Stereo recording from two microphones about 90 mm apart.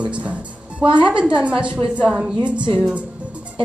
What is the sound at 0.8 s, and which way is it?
Speech, 65° right (ahead or behind).